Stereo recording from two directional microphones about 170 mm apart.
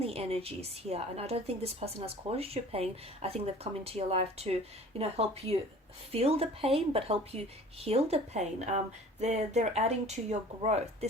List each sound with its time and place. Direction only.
0.0 s a woman's voice: 35° right (ahead or behind)